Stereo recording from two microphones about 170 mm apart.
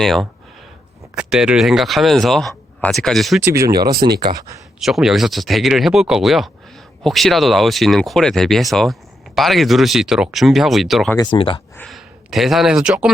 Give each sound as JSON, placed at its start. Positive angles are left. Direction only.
{"t": 0.0, "sound": "speech", "side_deg": 0}
{"t": 3.4, "sound": "speech", "side_deg": -20}
{"t": 4.0, "sound": "speech", "side_deg": -40}
{"t": 4.8, "sound": "speech", "side_deg": 0}
{"t": 11.2, "sound": "speech", "side_deg": 30}
{"t": 11.8, "sound": "speech", "side_deg": 0}